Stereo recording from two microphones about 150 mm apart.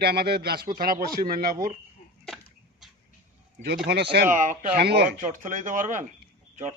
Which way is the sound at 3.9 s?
90° right.